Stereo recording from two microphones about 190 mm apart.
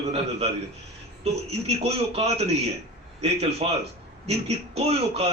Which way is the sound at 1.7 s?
35° right (ahead or behind).